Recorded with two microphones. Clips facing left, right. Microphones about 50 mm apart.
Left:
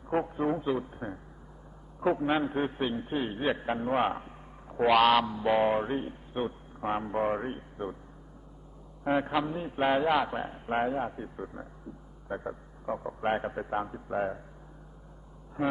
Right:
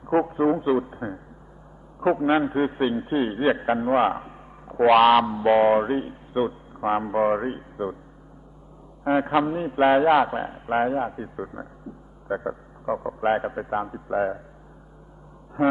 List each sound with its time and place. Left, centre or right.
0.0 s a man's voice: right
9.2 s a man's voice: right
15.6 s a man's voice: right